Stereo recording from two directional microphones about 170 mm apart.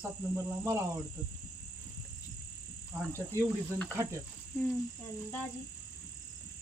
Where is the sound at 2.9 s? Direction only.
15° right (ahead or behind).